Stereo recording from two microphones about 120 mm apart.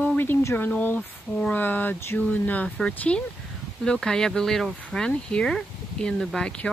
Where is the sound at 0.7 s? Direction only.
15° left (ahead or behind).